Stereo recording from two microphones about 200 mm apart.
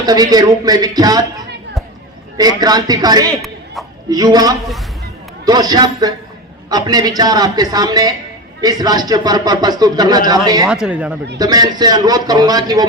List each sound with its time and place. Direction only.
0.0 s speech: 20° right (ahead or behind)
2.4 s speech: 20° right (ahead or behind)
10.7 s speech: 5° right (ahead or behind)
11.3 s speech: 20° right (ahead or behind)